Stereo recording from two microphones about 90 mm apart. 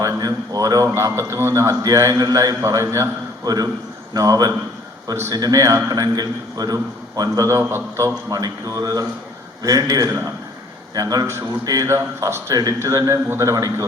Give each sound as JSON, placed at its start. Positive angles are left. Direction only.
{"t": 0.0, "sound": "a sound", "side_deg": -45}
{"t": 0.9, "sound": "a man's voice", "side_deg": -35}
{"t": 3.4, "sound": "a man's voice", "side_deg": -45}
{"t": 8.4, "sound": "a man's voice", "side_deg": -45}